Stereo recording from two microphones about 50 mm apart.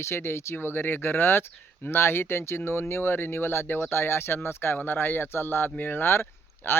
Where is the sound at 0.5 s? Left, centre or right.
Left.